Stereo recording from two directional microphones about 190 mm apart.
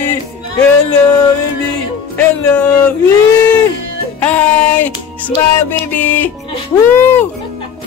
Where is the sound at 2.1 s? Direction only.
5° left (ahead or behind).